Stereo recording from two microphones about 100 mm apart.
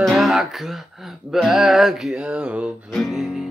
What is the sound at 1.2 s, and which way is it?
Speech, centre (ahead or behind).